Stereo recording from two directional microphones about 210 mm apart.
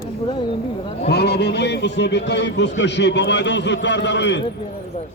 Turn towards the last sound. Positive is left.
turn(degrees=55)  # may be behind; listen again after turning